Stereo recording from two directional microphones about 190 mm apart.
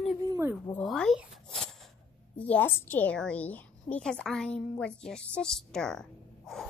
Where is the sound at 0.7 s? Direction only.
5° left (ahead or behind).